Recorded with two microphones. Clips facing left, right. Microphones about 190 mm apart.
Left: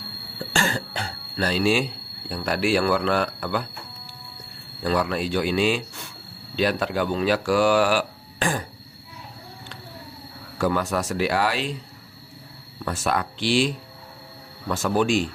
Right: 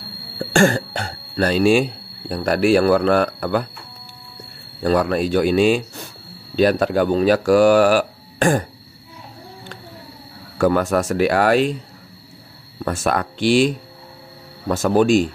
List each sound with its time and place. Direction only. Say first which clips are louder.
0.4 s speech: right 10 dB; 50° right (ahead or behind)
4.8 s speech: right 6 dB; 45° right (ahead or behind)
10.6 s speech: right 7 dB; 50° right (ahead or behind)
12.7 s speech: right 5 dB; 50° right (ahead or behind)